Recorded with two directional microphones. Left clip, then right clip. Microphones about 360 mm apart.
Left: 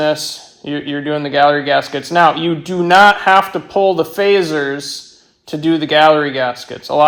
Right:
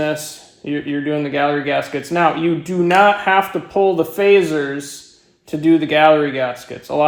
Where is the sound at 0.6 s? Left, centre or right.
Left.